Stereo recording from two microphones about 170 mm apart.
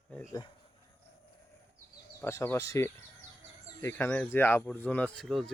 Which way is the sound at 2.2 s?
15° left (ahead or behind).